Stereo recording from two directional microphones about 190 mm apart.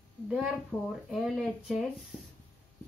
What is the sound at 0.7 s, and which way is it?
A woman's voice, 5° right (ahead or behind).